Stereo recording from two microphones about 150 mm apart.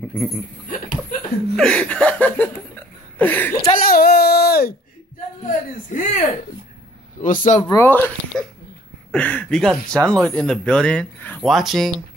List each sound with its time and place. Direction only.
1.6 s speech: 5° left (ahead or behind)
3.7 s a sound: 75° left (ahead or behind); by 4.7 s 90° left
5.4 s speech: 55° left (ahead or behind)
7.6 s speech: 15° left (ahead or behind)
8.3 s speech: 5° left (ahead or behind)